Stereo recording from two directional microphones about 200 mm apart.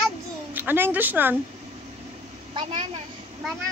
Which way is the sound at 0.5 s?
10° right (ahead or behind).